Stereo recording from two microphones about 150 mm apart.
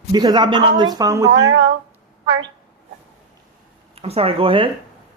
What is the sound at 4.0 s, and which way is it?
Speech, 40° right (ahead or behind).